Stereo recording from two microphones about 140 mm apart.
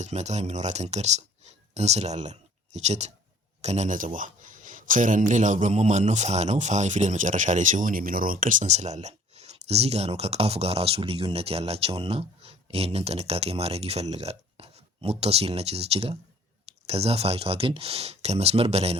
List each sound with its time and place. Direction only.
0.0 s speech: 55° right (ahead or behind)